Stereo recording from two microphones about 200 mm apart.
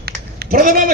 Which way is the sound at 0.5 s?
45° right (ahead or behind).